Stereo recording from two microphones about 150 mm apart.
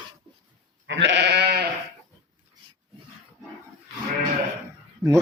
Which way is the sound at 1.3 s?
90° right.